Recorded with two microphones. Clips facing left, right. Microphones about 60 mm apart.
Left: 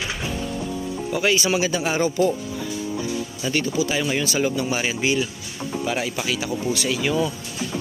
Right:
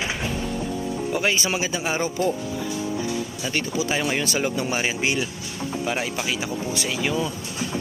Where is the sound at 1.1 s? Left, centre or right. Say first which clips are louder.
Left 4 dB; right.